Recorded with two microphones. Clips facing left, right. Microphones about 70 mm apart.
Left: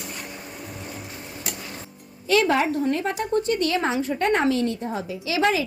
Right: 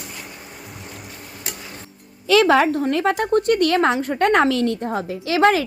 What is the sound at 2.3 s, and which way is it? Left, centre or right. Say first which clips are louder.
Speech: right 5 dB; right.